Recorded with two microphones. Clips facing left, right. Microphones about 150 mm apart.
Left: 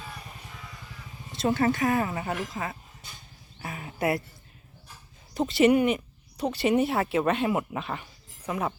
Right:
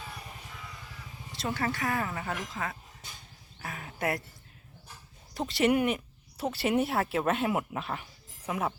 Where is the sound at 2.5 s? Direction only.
10° left (ahead or behind).